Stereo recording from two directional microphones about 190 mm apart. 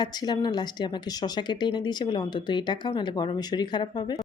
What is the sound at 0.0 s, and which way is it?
Speech, 20° left (ahead or behind).